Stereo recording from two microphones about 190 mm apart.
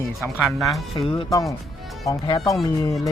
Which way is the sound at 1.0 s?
30° left (ahead or behind).